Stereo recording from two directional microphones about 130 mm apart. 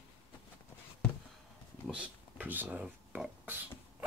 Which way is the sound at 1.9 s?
10° right (ahead or behind).